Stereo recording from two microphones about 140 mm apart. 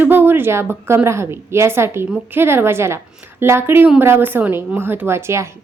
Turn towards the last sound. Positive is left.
turn(degrees=-20)  # may be behind; listen again after turning